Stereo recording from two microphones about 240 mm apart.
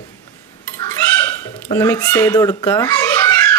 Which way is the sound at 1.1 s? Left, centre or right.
Centre.